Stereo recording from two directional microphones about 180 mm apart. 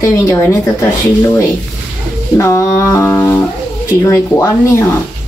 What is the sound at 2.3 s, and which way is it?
Speech, 15° left (ahead or behind).